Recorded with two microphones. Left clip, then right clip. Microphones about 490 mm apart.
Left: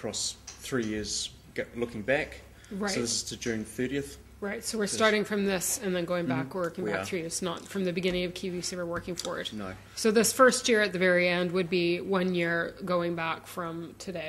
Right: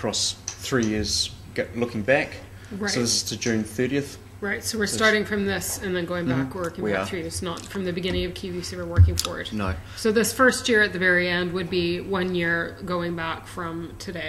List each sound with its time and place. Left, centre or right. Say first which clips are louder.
0.0 s speech: right 8 dB; centre
4.4 s speech: right 6 dB; left